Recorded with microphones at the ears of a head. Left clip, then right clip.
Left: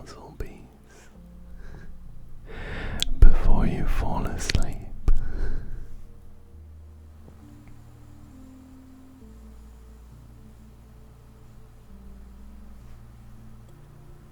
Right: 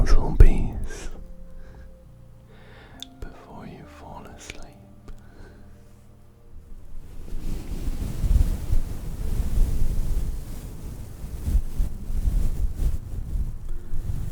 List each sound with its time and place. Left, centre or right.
0.0 s whispering: right
2.5 s whispering: left
7.3 s wind noise: right
13.9 s music: right